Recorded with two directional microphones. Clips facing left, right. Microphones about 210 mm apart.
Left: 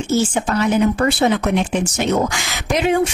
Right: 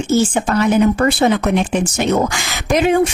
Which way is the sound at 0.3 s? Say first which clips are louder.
Right 3 dB; 50° right (ahead or behind).